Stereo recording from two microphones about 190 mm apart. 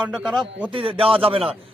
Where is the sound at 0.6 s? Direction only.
25° right (ahead or behind).